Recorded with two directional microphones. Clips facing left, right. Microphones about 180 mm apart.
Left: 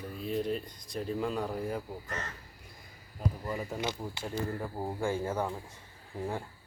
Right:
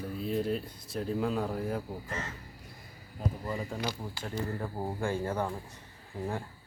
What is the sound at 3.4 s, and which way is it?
Speech, 5° left (ahead or behind).